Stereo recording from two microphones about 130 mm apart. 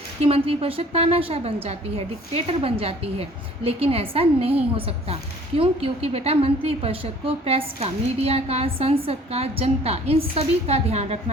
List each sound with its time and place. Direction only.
0.3 s a woman's voice: 45° right (ahead or behind)
5.5 s a woman's voice: 45° right (ahead or behind)